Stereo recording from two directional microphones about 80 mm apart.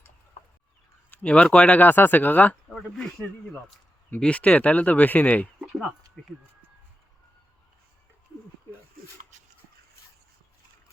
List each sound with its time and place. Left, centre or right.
1.1 s speech: centre
2.6 s speech: centre
4.2 s speech: centre